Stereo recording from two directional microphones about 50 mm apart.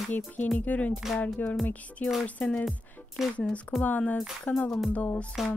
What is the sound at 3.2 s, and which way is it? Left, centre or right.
Speech, centre.